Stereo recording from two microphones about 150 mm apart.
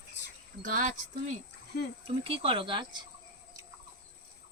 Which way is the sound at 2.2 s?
35° right (ahead or behind).